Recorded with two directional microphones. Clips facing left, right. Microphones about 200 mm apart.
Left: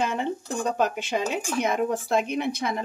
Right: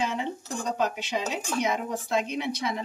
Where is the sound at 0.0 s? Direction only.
55° left (ahead or behind).